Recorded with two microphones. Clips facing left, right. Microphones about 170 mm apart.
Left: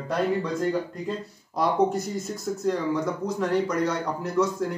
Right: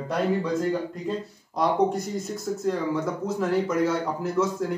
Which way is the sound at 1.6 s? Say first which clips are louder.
Even; centre (ahead or behind).